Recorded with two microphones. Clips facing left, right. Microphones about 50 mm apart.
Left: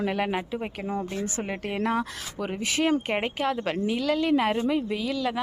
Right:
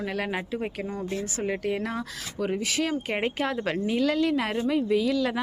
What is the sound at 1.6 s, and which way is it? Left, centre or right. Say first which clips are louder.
Speech: left 2 dB; left.